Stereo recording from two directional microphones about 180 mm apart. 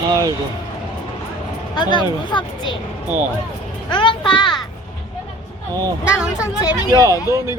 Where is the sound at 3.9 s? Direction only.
25° left (ahead or behind).